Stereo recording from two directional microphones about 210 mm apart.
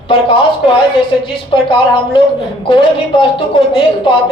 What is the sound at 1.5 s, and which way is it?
A man's voice, 25° left (ahead or behind).